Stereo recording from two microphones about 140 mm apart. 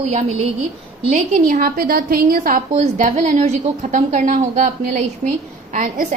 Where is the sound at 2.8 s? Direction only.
60° right (ahead or behind).